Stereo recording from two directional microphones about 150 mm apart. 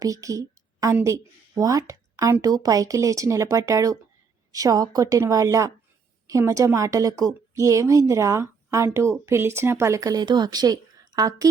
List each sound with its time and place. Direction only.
0.0 s a woman's voice: 20° right (ahead or behind)